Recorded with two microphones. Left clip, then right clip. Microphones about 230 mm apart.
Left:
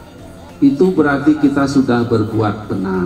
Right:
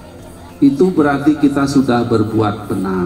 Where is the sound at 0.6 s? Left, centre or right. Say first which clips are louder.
Even; right.